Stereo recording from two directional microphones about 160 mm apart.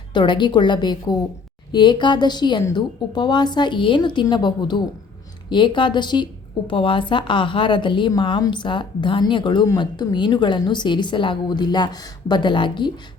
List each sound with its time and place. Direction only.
0.1 s a woman's voice: 30° left (ahead or behind)